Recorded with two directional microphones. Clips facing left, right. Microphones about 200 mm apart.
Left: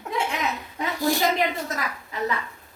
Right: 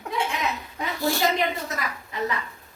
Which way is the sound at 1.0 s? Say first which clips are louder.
Left 2 dB; 15° left (ahead or behind).